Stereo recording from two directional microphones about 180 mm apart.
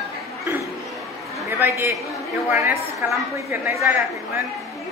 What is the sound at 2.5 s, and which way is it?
A man's voice, 15° right (ahead or behind).